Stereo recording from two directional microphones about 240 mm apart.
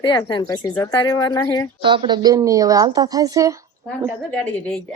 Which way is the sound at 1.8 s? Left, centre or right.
Centre.